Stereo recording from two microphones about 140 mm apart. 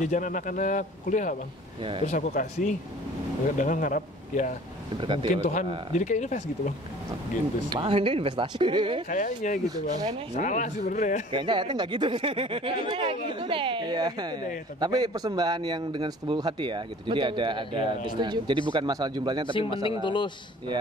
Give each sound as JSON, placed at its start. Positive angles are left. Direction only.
{"t": 0.0, "sound": "speech", "side_deg": 65}
{"t": 5.0, "sound": "a man's voice", "side_deg": -40}
{"t": 5.3, "sound": "speech", "side_deg": 60}
{"t": 7.7, "sound": "a man's voice", "side_deg": -40}
{"t": 9.1, "sound": "speech", "side_deg": 70}
{"t": 11.3, "sound": "a man's voice", "side_deg": -35}
{"t": 19.5, "sound": "speech", "side_deg": 40}